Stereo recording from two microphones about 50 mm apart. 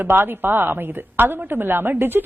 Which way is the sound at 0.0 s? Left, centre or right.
Right.